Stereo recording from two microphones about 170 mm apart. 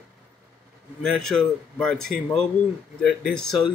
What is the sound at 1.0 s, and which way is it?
Speech, 5° left (ahead or behind).